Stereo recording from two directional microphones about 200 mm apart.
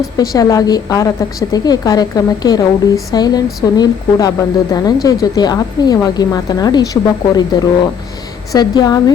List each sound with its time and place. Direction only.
0.2 s a woman's voice: 15° left (ahead or behind)